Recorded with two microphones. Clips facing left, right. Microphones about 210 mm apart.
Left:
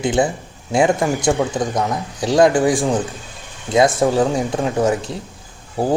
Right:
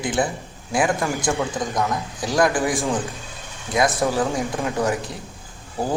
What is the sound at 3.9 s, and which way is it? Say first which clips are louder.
Speech: left 5 dB; 30° left (ahead or behind).